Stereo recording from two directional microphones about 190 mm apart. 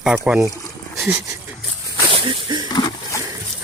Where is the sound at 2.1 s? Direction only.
30° right (ahead or behind).